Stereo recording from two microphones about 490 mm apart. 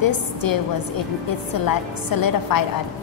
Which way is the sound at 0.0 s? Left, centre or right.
Left.